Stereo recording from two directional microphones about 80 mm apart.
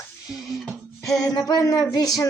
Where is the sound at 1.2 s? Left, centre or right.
Left.